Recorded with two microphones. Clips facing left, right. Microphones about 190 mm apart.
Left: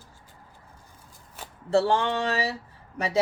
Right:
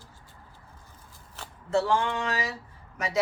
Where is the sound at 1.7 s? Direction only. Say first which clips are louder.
Left 3 dB; 30° left (ahead or behind).